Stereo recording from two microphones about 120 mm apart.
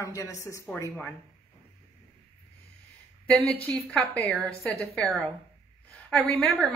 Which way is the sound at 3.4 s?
10° left (ahead or behind).